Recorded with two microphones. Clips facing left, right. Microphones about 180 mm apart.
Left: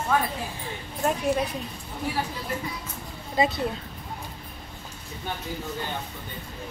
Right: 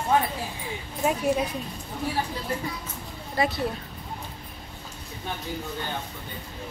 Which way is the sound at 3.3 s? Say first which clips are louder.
Left 2 dB; 20° left (ahead or behind).